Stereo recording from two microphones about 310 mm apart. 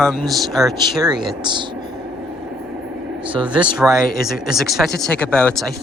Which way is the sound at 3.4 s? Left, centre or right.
Centre.